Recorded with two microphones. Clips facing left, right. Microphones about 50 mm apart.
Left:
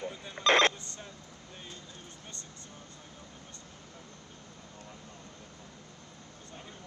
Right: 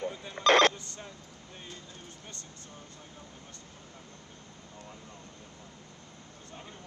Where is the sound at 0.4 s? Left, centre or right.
Left.